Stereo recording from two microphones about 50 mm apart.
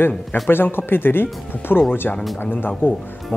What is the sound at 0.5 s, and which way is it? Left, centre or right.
A woman's voice, left.